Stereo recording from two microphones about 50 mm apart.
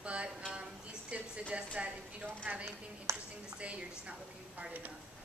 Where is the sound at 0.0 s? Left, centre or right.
Right.